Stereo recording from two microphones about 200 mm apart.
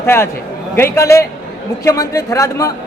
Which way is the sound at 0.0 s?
10° left (ahead or behind).